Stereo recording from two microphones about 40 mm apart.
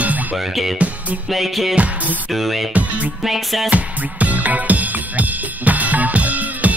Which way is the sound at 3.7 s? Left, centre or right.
Right.